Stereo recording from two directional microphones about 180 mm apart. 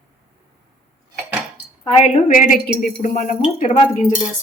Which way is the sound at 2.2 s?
50° left (ahead or behind).